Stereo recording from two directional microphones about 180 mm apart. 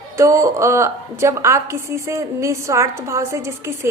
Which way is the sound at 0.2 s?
15° right (ahead or behind).